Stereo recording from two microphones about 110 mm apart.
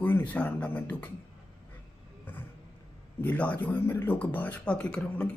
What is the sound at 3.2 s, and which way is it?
Speech, 15° left (ahead or behind).